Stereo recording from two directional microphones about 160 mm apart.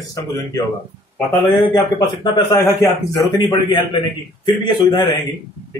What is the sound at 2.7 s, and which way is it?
A man's voice, 20° left (ahead or behind).